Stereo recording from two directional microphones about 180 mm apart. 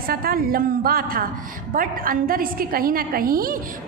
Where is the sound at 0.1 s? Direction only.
55° right (ahead or behind).